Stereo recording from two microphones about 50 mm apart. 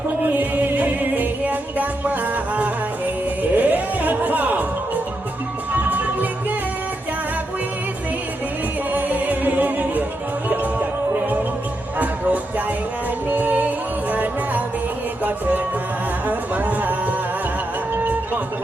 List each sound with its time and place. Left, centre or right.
0.2 s music: right
5.7 s music: right
8.9 s music: right
11.9 s music: right
16.2 s a sound: right
17.9 s music: right